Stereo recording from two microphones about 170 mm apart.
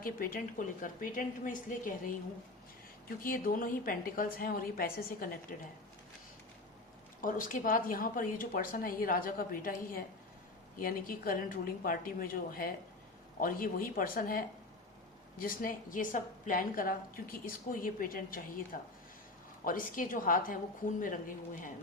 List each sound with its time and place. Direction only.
0.0 s a woman's voice: 60° left (ahead or behind)
3.2 s a woman's voice: 55° left (ahead or behind)
7.2 s a woman's voice: 55° left (ahead or behind)